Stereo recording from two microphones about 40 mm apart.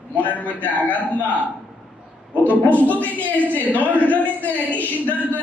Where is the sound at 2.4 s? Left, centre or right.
Left.